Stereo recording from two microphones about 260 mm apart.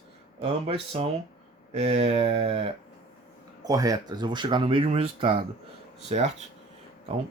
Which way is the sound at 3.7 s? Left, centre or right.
Centre.